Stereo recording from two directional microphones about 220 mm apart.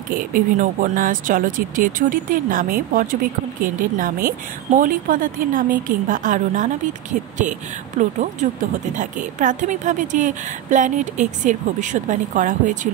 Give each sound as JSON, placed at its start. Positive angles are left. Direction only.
{"t": 0.3, "sound": "a woman's voice", "side_deg": -35}
{"t": 8.0, "sound": "a woman's voice", "side_deg": -35}